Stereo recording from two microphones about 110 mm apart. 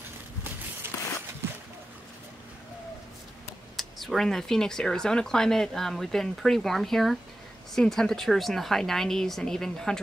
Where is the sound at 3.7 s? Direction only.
Centre (ahead or behind).